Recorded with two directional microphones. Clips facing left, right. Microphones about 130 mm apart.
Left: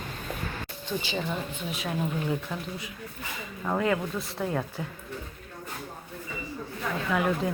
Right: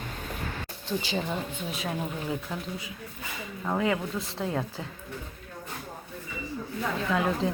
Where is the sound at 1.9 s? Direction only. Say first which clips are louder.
Left 4 dB; 15° right (ahead or behind).